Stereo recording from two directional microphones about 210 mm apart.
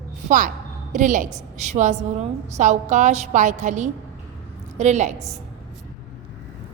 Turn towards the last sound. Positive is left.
turn(degrees=-35)  # may be behind; listen again after turning